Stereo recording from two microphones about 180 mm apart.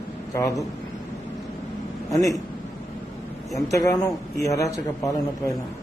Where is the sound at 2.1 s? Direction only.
20° left (ahead or behind).